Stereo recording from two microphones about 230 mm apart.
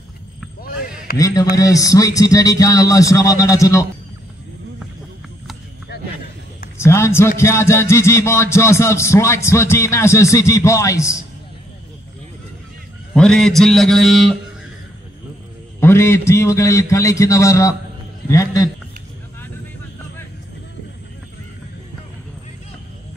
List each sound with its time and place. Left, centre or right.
0.6 s basketball bounce: left
1.1 s music: centre
6.8 s music: centre
13.1 s a man's voice: centre
15.8 s music: centre